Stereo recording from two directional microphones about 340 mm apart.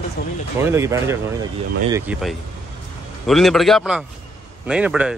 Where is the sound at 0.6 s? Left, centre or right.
Centre.